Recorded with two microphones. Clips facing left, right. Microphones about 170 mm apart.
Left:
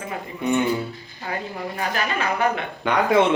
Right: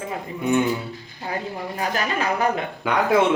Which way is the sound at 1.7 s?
40° right (ahead or behind).